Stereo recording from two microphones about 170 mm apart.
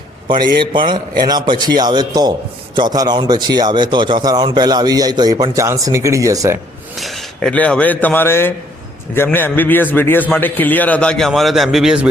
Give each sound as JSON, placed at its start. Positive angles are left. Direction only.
{"t": 0.3, "sound": "speech", "side_deg": -25}
{"t": 6.9, "sound": "a man's voice", "side_deg": 0}